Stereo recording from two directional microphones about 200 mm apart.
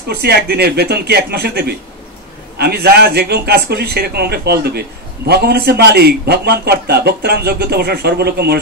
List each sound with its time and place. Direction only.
0.1 s a man's voice: 50° right (ahead or behind)